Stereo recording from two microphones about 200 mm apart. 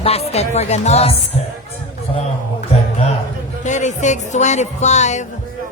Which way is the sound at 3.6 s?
35° left (ahead or behind).